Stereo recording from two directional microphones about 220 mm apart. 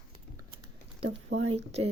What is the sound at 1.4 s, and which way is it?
Speech, 30° right (ahead or behind).